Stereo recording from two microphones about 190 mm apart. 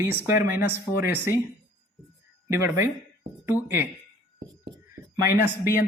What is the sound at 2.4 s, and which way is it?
Speech, 15° right (ahead or behind).